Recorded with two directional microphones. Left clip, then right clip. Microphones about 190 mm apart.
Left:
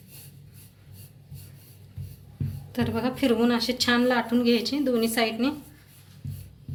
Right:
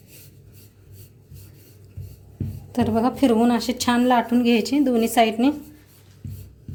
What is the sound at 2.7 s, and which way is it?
A woman's voice, 35° right (ahead or behind).